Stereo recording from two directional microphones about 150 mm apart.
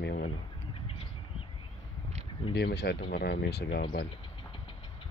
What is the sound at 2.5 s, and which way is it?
Speech, 90° left.